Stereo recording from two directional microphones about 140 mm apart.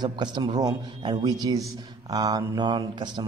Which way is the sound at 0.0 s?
30° right (ahead or behind).